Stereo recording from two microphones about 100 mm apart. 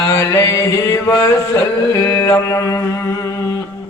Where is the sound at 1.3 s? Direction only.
30° left (ahead or behind).